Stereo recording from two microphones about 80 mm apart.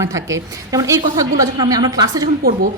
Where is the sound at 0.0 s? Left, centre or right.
Right.